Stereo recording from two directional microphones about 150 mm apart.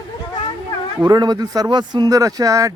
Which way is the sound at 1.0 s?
30° right (ahead or behind).